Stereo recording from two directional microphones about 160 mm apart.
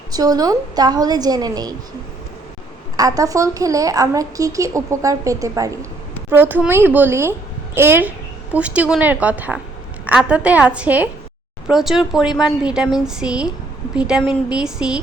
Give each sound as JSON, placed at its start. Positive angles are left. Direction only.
{"t": 0.1, "sound": "a woman's voice", "side_deg": -25}
{"t": 3.0, "sound": "a woman's voice", "side_deg": -20}